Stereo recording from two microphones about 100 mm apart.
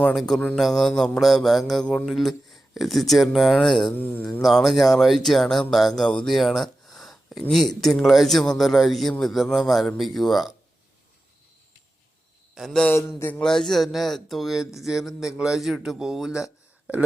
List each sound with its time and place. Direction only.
0.0 s speech: 5° left (ahead or behind)
3.9 s a sound: 20° left (ahead or behind)
4.4 s speech: centre (ahead or behind)
12.5 s a man's voice: centre (ahead or behind)
12.9 s a sound: 25° left (ahead or behind)
13.4 s speech: 5° left (ahead or behind)